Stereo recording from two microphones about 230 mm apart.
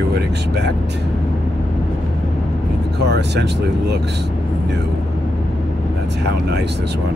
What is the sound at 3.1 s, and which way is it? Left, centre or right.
Speech, right.